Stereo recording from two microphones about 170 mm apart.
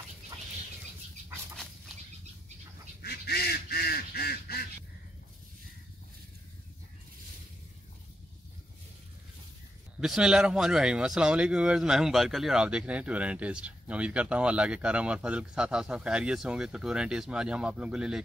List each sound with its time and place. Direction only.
3.0 s duck: 70° left (ahead or behind)
9.9 s speech: 5° right (ahead or behind)